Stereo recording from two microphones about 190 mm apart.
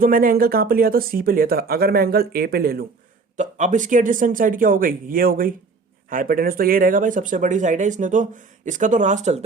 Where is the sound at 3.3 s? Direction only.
40° right (ahead or behind).